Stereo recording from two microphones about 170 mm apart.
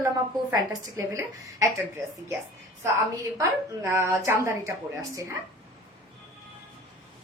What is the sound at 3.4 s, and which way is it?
A woman's voice, 15° right (ahead or behind).